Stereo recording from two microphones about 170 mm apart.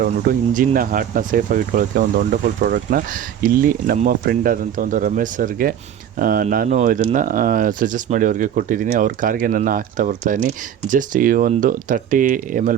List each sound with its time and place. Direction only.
0.0 s speech: 55° right (ahead or behind)